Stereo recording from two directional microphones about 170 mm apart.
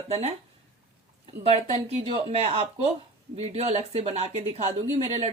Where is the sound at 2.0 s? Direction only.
35° right (ahead or behind).